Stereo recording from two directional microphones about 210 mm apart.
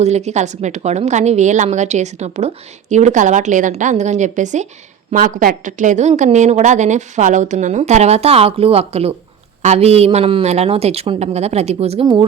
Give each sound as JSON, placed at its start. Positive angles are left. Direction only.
{"t": 0.0, "sound": "a woman's voice", "side_deg": -30}